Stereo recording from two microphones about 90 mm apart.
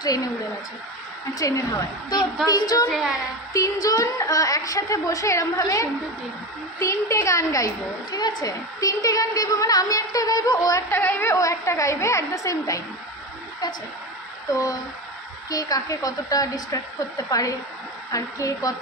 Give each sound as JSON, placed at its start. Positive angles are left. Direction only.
{"t": 0.0, "sound": "a woman's voice", "side_deg": 45}
{"t": 1.4, "sound": "a woman's voice", "side_deg": 45}
{"t": 10.9, "sound": "a woman's voice", "side_deg": 20}
{"t": 11.3, "sound": "a woman's voice", "side_deg": 35}
{"t": 14.5, "sound": "a woman's voice", "side_deg": 40}